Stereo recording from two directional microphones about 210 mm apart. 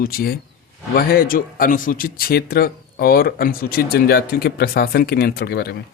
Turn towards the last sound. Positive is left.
turn(degrees=50)  # may be behind; listen again after turning